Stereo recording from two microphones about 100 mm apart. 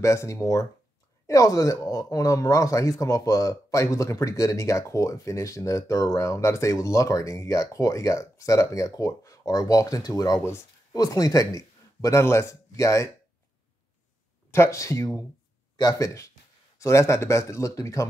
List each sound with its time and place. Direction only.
0.0 s speech: 30° left (ahead or behind)
14.5 s speech: 30° left (ahead or behind)